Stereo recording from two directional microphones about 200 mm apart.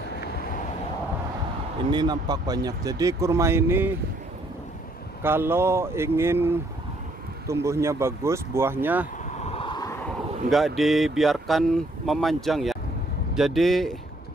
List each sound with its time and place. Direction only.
1.9 s speech: 20° right (ahead or behind)
5.2 s speech: 10° right (ahead or behind)
9.4 s vehicle: 30° left (ahead or behind)
10.0 s speech: centre (ahead or behind)